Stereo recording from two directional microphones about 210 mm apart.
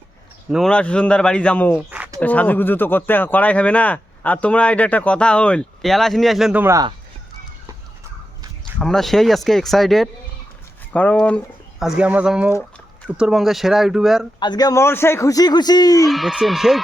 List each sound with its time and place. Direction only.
0.5 s speech: 5° left (ahead or behind)
1.9 s a sound: 10° right (ahead or behind)
2.2 s speech: 10° left (ahead or behind); by 6.9 s 15° right (ahead or behind)
8.8 s speech: centre (ahead or behind)
14.3 s speech: 20° left (ahead or behind)
16.0 s speech: centre (ahead or behind)